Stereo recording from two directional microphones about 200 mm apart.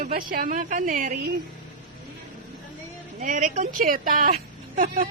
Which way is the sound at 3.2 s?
40° right (ahead or behind).